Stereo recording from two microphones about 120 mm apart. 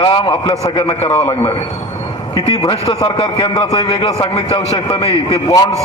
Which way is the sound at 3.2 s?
50° left (ahead or behind).